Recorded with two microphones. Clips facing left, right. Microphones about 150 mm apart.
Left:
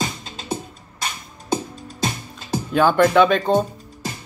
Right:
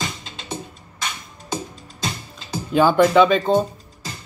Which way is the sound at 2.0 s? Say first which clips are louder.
Left 3 dB; 50° left (ahead or behind).